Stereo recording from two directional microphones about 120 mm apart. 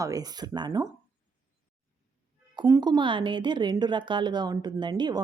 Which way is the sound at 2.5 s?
35° right (ahead or behind).